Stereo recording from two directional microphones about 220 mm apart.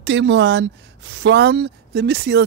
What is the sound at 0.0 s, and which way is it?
Speech, 55° right (ahead or behind).